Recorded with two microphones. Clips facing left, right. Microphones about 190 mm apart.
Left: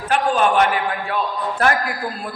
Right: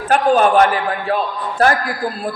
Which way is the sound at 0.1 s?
40° right (ahead or behind).